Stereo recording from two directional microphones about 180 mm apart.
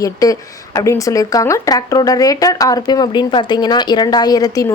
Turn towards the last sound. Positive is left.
turn(degrees=20)  # may be behind; listen again after turning